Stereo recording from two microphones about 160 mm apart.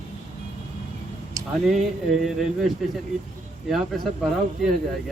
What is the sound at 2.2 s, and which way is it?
Speech, centre (ahead or behind).